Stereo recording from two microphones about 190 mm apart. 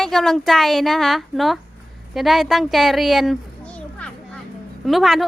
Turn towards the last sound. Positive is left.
turn(degrees=0)  # may be behind; listen again after turning